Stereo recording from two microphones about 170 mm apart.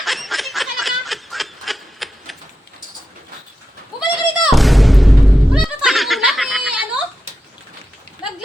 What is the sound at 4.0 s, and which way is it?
Goat, centre (ahead or behind).